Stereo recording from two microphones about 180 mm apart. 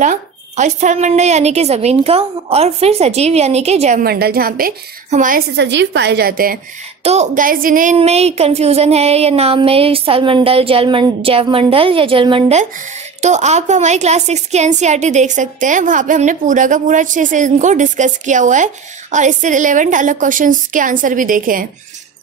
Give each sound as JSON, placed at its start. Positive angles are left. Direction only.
{"t": 0.0, "sound": "a woman's voice", "side_deg": -45}
{"t": 4.0, "sound": "a woman's voice", "side_deg": -60}
{"t": 5.6, "sound": "a woman's voice", "side_deg": -75}
{"t": 7.0, "sound": "a woman's voice", "side_deg": -35}